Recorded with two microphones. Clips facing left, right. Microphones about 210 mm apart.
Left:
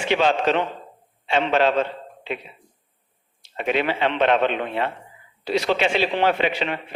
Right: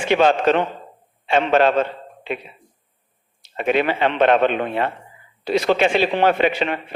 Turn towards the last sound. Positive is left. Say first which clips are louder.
# right 4 dB
turn(degrees=-50)  # may be behind; listen again after turning